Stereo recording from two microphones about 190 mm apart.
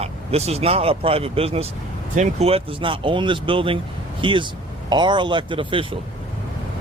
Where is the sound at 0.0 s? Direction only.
35° right (ahead or behind).